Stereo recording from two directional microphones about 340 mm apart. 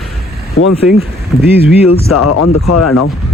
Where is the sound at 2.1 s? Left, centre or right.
Left.